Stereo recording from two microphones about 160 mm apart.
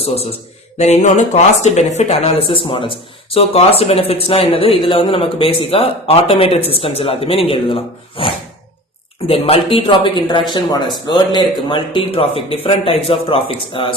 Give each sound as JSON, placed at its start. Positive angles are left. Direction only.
{"t": 0.0, "sound": "speech", "side_deg": 40}